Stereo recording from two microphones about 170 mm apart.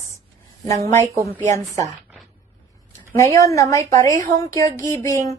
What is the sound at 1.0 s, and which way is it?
Speech, 20° right (ahead or behind).